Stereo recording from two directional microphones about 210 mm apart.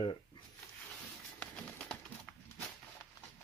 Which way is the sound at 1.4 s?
5° left (ahead or behind).